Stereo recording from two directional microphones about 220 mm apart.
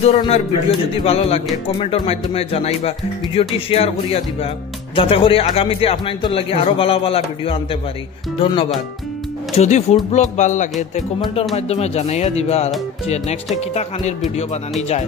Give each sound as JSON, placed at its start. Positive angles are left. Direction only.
{"t": 0.0, "sound": "speech", "side_deg": 30}
{"t": 9.6, "sound": "music", "side_deg": 30}
{"t": 11.5, "sound": "speech", "side_deg": 30}
{"t": 14.8, "sound": "music", "side_deg": 30}